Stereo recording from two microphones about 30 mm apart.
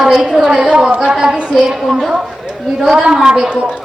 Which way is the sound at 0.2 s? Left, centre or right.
Right.